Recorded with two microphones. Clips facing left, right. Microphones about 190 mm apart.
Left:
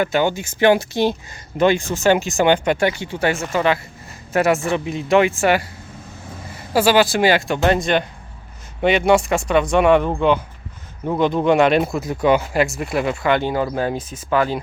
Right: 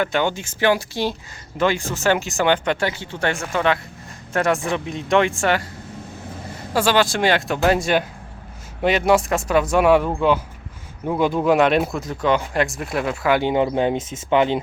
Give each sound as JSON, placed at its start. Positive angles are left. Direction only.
{"t": 0.0, "sound": "speech", "side_deg": 10}
{"t": 0.7, "sound": "speech", "side_deg": 20}
{"t": 6.7, "sound": "speech", "side_deg": 5}
{"t": 13.4, "sound": "speech", "side_deg": -20}